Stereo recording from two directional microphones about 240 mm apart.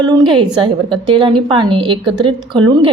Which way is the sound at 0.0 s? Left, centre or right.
Centre.